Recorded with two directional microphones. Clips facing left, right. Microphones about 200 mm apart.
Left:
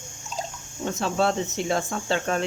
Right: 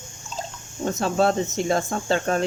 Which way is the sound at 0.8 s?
45° right (ahead or behind).